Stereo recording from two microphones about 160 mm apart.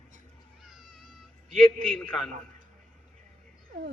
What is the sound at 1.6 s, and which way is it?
Speech, 5° left (ahead or behind).